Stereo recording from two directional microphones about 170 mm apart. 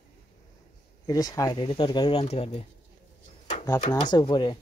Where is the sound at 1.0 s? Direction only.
20° left (ahead or behind).